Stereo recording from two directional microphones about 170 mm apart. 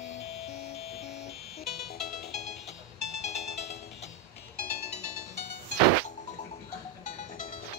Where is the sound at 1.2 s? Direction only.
70° left (ahead or behind).